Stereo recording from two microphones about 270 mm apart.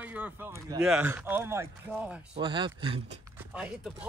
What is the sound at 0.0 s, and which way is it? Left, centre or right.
Speech, centre.